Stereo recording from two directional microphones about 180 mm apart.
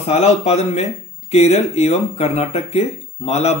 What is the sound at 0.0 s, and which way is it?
Speech, 35° left (ahead or behind).